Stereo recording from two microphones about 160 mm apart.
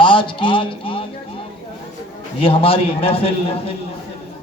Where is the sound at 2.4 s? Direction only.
35° left (ahead or behind).